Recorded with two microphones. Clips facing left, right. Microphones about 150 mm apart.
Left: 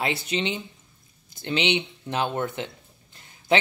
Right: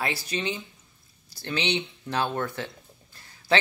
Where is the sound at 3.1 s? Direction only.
20° left (ahead or behind).